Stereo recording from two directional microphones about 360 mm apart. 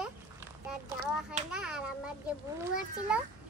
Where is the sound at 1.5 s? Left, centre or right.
Centre.